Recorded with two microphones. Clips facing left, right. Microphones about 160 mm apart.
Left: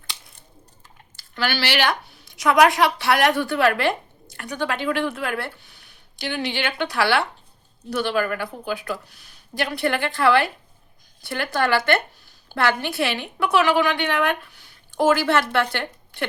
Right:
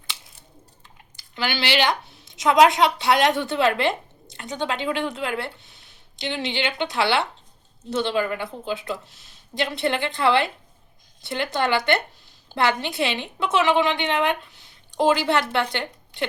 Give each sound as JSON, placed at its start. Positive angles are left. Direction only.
{"t": 1.1, "sound": "a woman's voice", "side_deg": -20}